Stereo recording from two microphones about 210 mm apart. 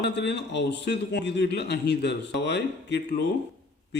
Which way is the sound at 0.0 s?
55° left (ahead or behind).